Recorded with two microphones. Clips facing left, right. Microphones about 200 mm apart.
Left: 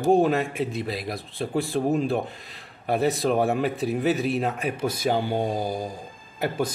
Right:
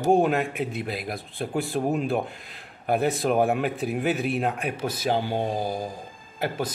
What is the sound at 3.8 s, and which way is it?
Speech, 35° left (ahead or behind).